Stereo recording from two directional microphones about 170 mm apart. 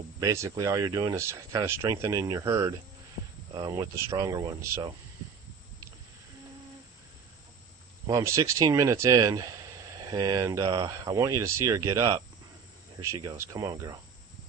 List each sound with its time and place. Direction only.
0.2 s speech: 20° right (ahead or behind)
8.0 s speech: 20° right (ahead or behind)